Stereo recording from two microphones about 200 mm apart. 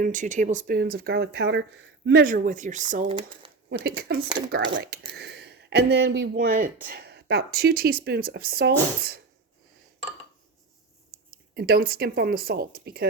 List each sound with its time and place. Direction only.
0.0 s speech: 40° right (ahead or behind)
3.7 s speech: 50° right (ahead or behind)
11.5 s speech: 50° right (ahead or behind)